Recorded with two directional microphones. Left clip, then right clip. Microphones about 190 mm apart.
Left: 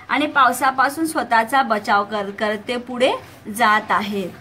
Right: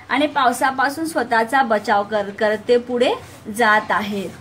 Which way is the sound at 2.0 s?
55° left (ahead or behind).